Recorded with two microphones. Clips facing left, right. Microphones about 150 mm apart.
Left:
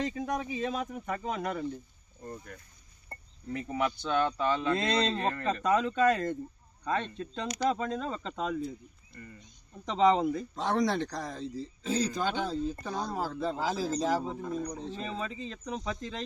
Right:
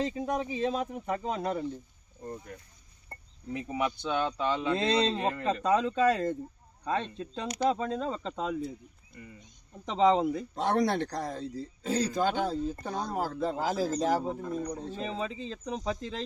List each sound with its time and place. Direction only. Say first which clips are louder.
0.0 s speech: right 2 dB; 25° right (ahead or behind)
2.2 s speech: right 2 dB; 15° right (ahead or behind)
4.8 s speech: right 2 dB; 30° right (ahead or behind)
5.1 s speech: right 1 dB; 15° right (ahead or behind)
5.6 s speech: even; 25° right (ahead or behind)
9.1 s speech: even; 10° right (ahead or behind)
9.9 s speech: even; 25° right (ahead or behind)
10.6 s a man's voice: right 2 dB; 60° right (ahead or behind)
13.7 s speech: right 2 dB; centre (ahead or behind)
15.2 s speech: right 2 dB; 30° right (ahead or behind)